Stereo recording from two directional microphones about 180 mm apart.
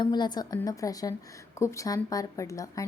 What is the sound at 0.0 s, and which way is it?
A woman's voice, 25° left (ahead or behind).